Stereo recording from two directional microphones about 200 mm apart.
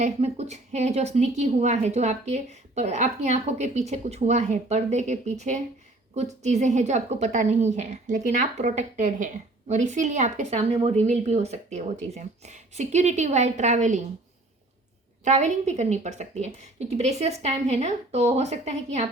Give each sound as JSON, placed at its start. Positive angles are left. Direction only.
{"t": 0.0, "sound": "a woman's voice", "side_deg": -35}
{"t": 15.2, "sound": "a woman's voice", "side_deg": -35}